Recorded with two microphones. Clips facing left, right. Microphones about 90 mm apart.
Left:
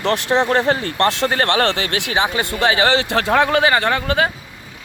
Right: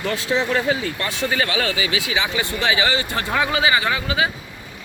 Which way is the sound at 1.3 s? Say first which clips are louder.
Left 5 dB; 60° left (ahead or behind).